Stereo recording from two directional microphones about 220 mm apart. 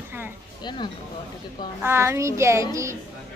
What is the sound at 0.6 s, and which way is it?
Speech, 20° left (ahead or behind).